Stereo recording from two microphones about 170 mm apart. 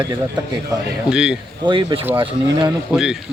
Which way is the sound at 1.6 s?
25° right (ahead or behind).